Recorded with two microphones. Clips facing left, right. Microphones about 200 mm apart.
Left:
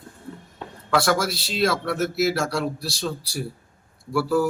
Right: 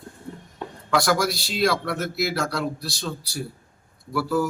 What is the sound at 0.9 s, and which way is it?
Speech, 5° left (ahead or behind).